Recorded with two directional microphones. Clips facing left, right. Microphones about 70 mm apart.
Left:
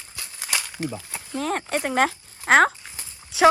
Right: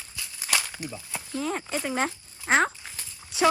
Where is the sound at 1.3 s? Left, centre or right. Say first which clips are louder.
Left 4 dB; left.